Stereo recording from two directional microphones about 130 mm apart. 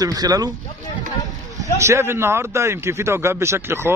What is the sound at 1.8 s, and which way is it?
A man's voice, 20° right (ahead or behind).